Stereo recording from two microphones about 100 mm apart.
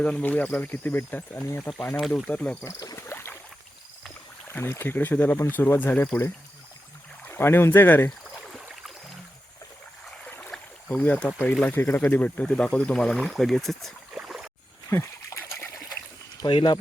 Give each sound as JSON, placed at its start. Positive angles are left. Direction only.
{"t": 0.0, "sound": "speech", "side_deg": 15}
{"t": 2.0, "sound": "speech", "side_deg": 0}
{"t": 2.3, "sound": "speech", "side_deg": 15}
{"t": 2.6, "sound": "cricket", "side_deg": 30}
{"t": 4.4, "sound": "speech", "side_deg": 25}
{"t": 7.3, "sound": "speech", "side_deg": 25}
{"t": 10.2, "sound": "boat", "side_deg": 15}
{"t": 10.5, "sound": "speech", "side_deg": 15}
{"t": 14.2, "sound": "rowboat", "side_deg": -5}
{"t": 14.8, "sound": "dog", "side_deg": 30}
{"t": 16.4, "sound": "speech", "side_deg": 55}